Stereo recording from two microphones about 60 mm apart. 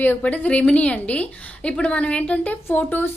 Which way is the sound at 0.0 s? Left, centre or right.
Left.